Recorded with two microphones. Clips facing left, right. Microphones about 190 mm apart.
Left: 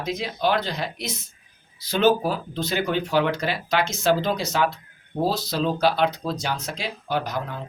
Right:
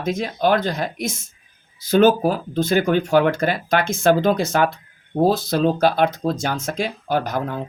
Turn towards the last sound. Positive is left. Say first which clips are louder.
# right 5 dB
turn(degrees=-50)  # may be behind; listen again after turning